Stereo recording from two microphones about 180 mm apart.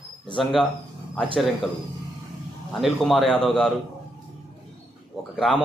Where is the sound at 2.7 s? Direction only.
Centre (ahead or behind).